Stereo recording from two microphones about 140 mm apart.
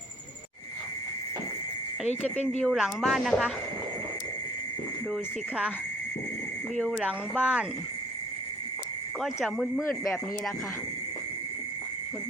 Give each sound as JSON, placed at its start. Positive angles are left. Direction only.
{"t": 2.0, "sound": "speech", "side_deg": 55}
{"t": 2.6, "sound": "speech", "side_deg": 5}
{"t": 5.1, "sound": "speech", "side_deg": -10}
{"t": 6.7, "sound": "speech", "side_deg": -5}
{"t": 9.2, "sound": "speech", "side_deg": 0}
{"t": 9.8, "sound": "speech", "side_deg": 15}